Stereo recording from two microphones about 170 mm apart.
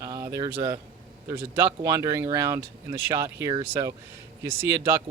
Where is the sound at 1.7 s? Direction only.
20° right (ahead or behind).